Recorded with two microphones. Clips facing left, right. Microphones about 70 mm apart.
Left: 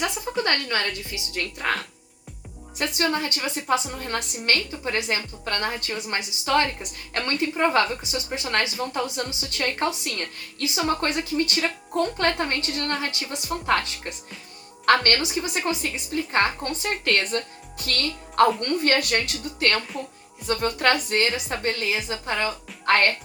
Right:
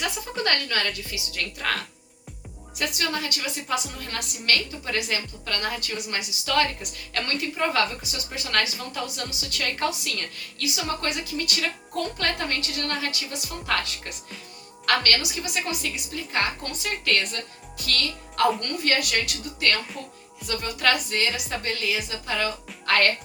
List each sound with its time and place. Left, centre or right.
0.4 s a woman's voice: left